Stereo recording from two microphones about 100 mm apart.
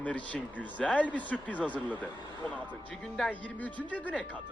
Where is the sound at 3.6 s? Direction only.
15° left (ahead or behind).